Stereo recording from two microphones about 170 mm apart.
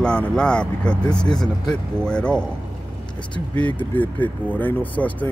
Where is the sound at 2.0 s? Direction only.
5° left (ahead or behind).